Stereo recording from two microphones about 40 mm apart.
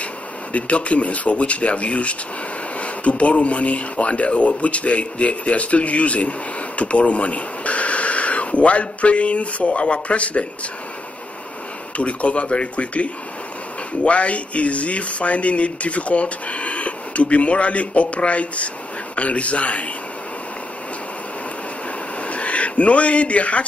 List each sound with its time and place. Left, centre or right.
0.0 s speech: left
12.0 s speech: left
22.2 s a sound: left